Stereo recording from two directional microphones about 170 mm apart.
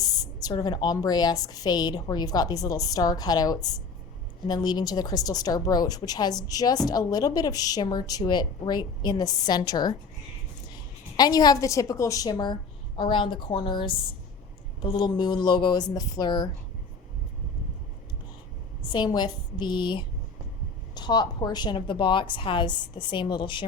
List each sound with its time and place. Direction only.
0.4 s a woman's voice: 25° left (ahead or behind)
11.2 s a woman's voice: 25° left (ahead or behind)
18.9 s a woman's voice: 25° left (ahead or behind)